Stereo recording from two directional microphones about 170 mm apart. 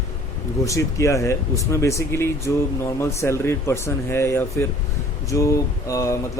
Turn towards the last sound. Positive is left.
turn(degrees=20)  # may be behind; listen again after turning